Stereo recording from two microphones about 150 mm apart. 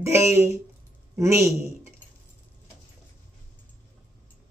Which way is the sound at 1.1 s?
20° right (ahead or behind).